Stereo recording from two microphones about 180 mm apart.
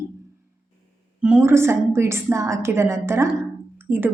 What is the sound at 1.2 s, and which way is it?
A woman's voice, 10° right (ahead or behind).